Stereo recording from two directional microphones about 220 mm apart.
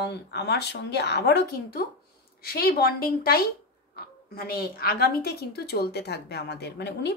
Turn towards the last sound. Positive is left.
turn(degrees=50)  # may be behind; listen again after turning